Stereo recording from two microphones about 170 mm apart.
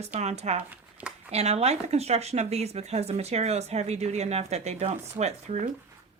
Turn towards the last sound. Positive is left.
turn(degrees=-40)  # may be behind; listen again after turning